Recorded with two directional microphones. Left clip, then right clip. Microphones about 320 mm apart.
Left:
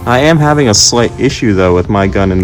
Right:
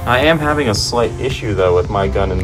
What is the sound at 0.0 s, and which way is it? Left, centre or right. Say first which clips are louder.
Speech: left 4 dB; centre.